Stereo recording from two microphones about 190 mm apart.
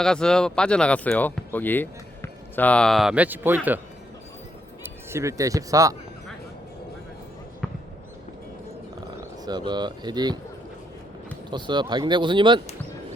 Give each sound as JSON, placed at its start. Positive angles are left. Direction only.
{"t": 0.0, "sound": "speech", "side_deg": 5}
{"t": 5.1, "sound": "speech", "side_deg": -15}
{"t": 9.4, "sound": "speech", "side_deg": -20}
{"t": 11.5, "sound": "speech", "side_deg": -25}